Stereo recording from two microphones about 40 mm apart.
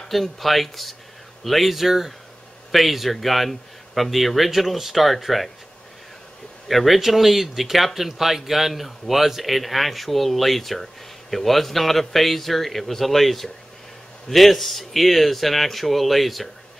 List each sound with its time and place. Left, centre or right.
0.1 s speech: centre
6.7 s speech: centre